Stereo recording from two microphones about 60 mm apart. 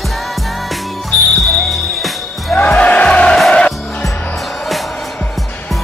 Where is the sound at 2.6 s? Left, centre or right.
Left.